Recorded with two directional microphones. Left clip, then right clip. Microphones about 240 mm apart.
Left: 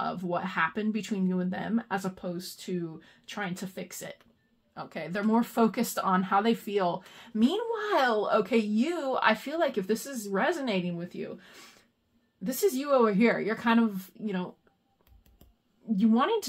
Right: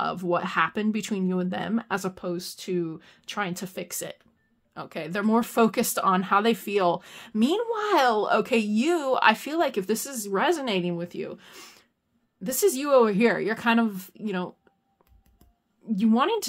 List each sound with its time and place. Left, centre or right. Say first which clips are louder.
0.0 s speech: right 5 dB; right
16.0 s speech: right 3 dB; right